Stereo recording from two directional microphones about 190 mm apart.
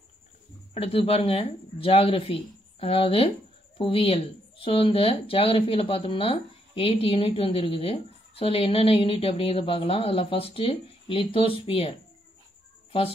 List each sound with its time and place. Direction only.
0.7 s a woman's voice: 30° left (ahead or behind)